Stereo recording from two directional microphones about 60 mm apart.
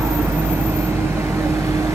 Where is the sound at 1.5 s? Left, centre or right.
Right.